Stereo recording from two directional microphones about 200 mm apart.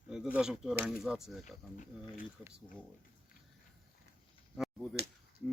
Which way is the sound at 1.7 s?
40° left (ahead or behind).